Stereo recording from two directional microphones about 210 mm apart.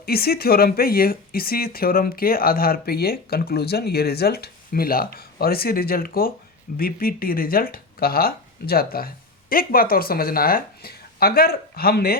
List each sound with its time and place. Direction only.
0.0 s speech: 45° left (ahead or behind)